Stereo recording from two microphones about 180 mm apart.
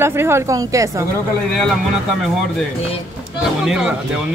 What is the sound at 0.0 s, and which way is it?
Speech, 15° right (ahead or behind).